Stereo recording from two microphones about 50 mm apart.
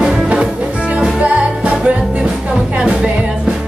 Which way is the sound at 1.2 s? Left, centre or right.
Right.